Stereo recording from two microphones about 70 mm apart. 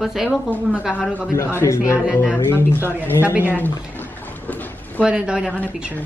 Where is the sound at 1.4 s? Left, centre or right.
Left.